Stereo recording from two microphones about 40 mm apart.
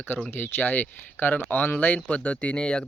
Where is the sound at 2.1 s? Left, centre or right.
Left.